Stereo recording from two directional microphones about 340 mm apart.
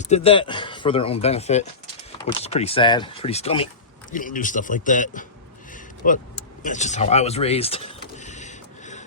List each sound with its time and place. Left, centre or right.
0.1 s a man's voice: centre
6.6 s vehicle: left